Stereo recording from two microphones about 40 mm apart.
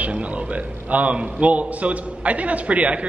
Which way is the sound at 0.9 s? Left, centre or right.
Right.